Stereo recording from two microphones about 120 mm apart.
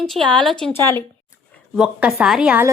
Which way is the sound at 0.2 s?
40° right (ahead or behind).